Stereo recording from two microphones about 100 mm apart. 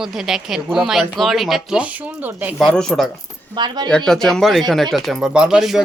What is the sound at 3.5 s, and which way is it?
Speech, 45° right (ahead or behind).